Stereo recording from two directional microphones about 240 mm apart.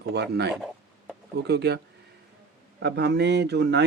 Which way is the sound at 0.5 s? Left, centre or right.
Centre.